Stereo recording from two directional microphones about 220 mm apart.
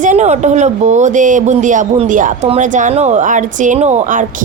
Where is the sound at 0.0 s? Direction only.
35° right (ahead or behind).